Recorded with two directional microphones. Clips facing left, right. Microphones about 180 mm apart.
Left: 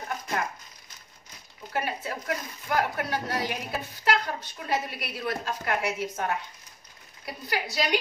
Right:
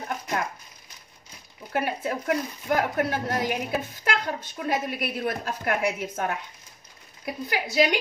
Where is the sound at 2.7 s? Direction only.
50° right (ahead or behind).